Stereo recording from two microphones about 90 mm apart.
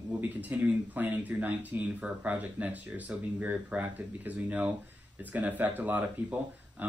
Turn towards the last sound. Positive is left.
turn(degrees=-20)  # may be behind; listen again after turning